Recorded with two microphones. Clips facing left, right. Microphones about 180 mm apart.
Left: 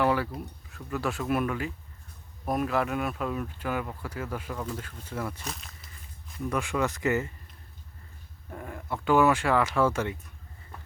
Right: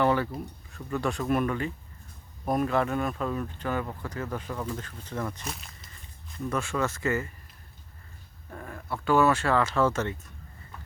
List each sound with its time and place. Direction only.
0.0 s speech: 5° left (ahead or behind)
6.3 s speech: 15° left (ahead or behind)
8.4 s speech: 15° left (ahead or behind)